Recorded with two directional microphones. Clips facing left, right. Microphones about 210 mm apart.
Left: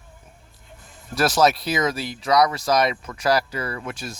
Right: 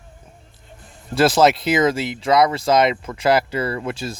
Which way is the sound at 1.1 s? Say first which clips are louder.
Right 4 dB; 25° right (ahead or behind).